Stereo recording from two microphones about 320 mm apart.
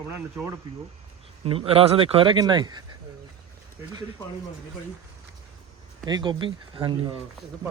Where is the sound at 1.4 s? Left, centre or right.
Centre.